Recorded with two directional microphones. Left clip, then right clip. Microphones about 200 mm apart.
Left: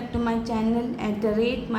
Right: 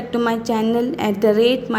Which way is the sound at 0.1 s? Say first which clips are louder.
Right 8 dB; 40° right (ahead or behind).